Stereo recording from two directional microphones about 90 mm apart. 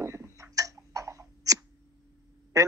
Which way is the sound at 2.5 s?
35° right (ahead or behind).